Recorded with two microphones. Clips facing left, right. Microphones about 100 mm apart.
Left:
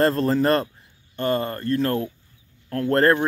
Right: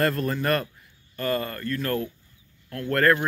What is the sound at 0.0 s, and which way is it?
Speech, 30° left (ahead or behind).